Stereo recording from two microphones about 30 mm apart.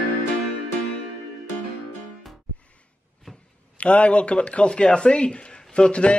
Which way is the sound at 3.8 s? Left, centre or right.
Left.